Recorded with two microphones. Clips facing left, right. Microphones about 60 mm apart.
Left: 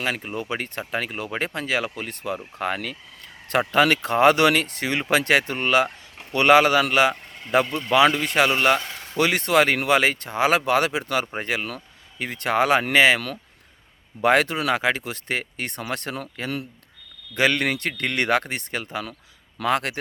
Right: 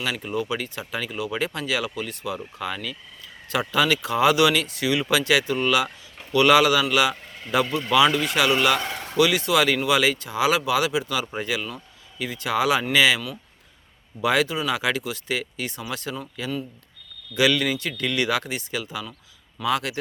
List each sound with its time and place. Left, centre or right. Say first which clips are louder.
0.0 s speech: even; left
2.6 s speech: left 3 dB; left
14.8 s speech: left 1 dB; left
17.3 s speech: even; left